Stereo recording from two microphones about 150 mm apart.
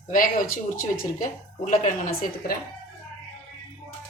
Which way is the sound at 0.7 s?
70° left (ahead or behind).